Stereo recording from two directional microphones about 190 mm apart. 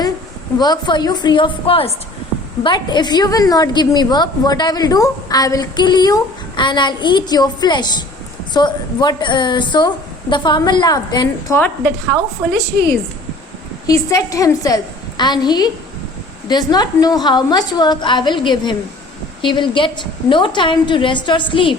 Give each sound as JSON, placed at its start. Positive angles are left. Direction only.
{"t": 0.6, "sound": "a woman's voice", "side_deg": 20}
{"t": 13.8, "sound": "a woman's voice", "side_deg": 20}